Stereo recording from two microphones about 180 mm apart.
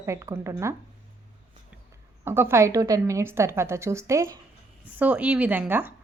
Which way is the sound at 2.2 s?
15° right (ahead or behind).